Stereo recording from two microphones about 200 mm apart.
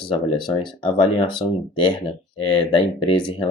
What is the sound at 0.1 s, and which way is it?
Speech, 25° left (ahead or behind).